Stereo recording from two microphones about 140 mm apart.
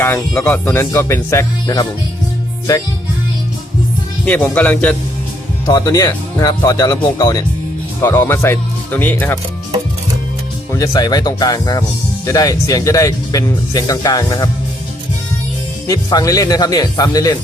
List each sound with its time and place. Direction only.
0.0 s speech: 15° left (ahead or behind)
4.5 s speech: 10° left (ahead or behind)
5.6 s speech: 25° left (ahead or behind)
8.0 s speech: 15° left (ahead or behind)
10.7 s speech: 25° left (ahead or behind)
15.9 s speech: 25° left (ahead or behind)